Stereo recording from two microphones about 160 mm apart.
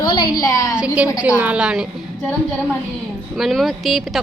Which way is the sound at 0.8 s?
10° right (ahead or behind).